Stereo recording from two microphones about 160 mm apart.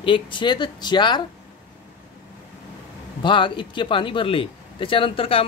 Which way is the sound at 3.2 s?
30° left (ahead or behind).